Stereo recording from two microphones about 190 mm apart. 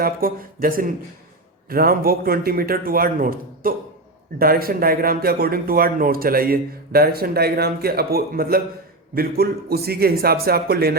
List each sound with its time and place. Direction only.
0.0 s speech: 50° right (ahead or behind)